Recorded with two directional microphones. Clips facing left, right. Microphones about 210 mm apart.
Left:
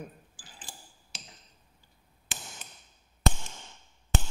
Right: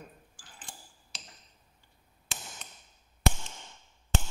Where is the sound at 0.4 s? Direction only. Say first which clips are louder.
Even; centre (ahead or behind).